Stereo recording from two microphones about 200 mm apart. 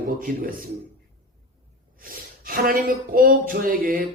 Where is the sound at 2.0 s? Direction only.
45° right (ahead or behind).